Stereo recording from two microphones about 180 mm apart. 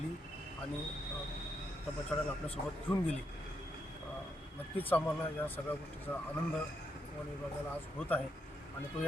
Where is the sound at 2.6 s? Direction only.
50° left (ahead or behind).